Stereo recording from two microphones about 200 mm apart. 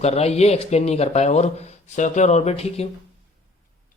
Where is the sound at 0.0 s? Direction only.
30° left (ahead or behind).